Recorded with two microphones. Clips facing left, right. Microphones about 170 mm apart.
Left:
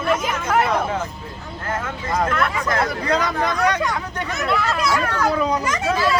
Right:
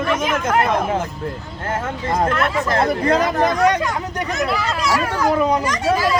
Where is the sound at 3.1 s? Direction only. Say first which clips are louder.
Right 4 dB; 40° right (ahead or behind).